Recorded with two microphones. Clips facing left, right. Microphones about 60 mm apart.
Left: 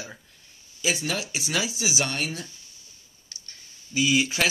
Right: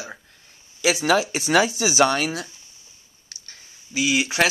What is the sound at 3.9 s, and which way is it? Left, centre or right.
Speech, right.